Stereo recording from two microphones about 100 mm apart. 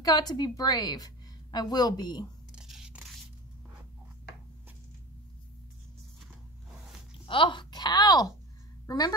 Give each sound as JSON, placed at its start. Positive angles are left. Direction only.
{"t": 0.0, "sound": "a woman's voice", "side_deg": 40}
{"t": 2.5, "sound": "scrape", "side_deg": -10}
{"t": 7.2, "sound": "a woman's voice", "side_deg": 55}